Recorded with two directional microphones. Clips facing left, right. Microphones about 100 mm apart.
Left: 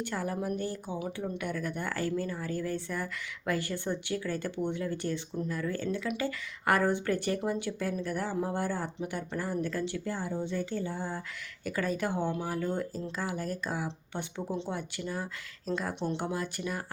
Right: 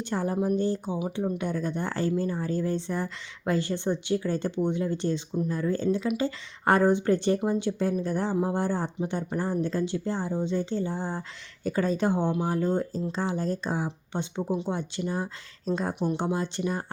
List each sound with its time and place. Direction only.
0.0 s speech: 25° right (ahead or behind)